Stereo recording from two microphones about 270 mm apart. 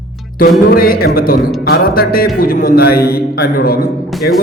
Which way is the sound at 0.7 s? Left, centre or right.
Left.